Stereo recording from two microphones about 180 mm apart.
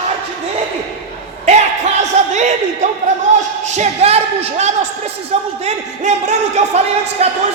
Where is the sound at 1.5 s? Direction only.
40° right (ahead or behind).